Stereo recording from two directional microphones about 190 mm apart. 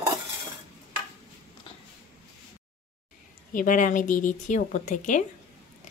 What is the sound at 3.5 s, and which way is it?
Speech, 45° left (ahead or behind).